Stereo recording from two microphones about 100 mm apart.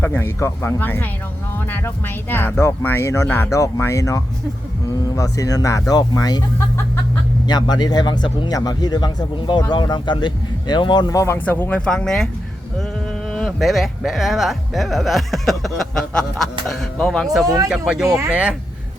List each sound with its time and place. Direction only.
0.0 s speech: 20° left (ahead or behind); by 6.4 s 40° left (ahead or behind)
7.4 s speech: 45° left (ahead or behind)
11.1 s speech: 30° left (ahead or behind)
11.3 s speech: 15° left (ahead or behind)
11.9 s speech: 5° left (ahead or behind)
13.3 s speech: centre (ahead or behind)
18.0 s speech: 35° right (ahead or behind)
18.3 s speech: 10° right (ahead or behind)